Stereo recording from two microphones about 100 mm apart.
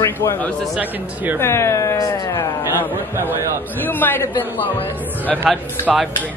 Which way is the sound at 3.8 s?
20° left (ahead or behind).